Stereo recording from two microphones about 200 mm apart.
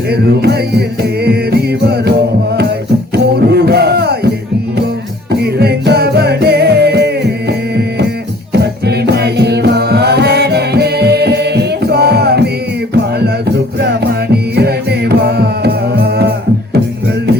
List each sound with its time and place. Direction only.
0.1 s music: 55° right (ahead or behind)
3.4 s music: 55° right (ahead or behind)
5.3 s music: 55° right (ahead or behind)
8.5 s music: 55° right (ahead or behind)